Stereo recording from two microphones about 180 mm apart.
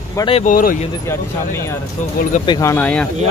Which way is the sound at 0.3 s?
45° left (ahead or behind).